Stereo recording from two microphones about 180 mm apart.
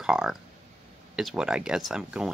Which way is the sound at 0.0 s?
5° right (ahead or behind).